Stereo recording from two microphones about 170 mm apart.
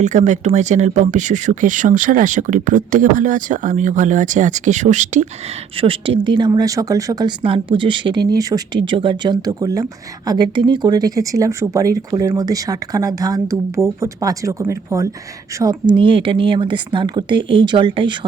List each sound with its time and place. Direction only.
0.0 s speech: 45° right (ahead or behind)
5.7 s speech: 35° right (ahead or behind)
15.9 s speech: 30° right (ahead or behind)